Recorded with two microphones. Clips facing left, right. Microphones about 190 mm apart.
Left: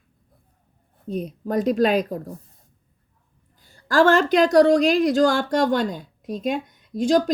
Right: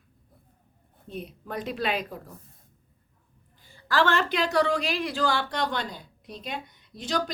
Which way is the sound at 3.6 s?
45° left (ahead or behind).